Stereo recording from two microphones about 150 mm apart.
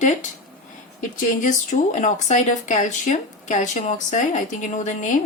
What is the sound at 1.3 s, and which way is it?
Speech, 60° left (ahead or behind).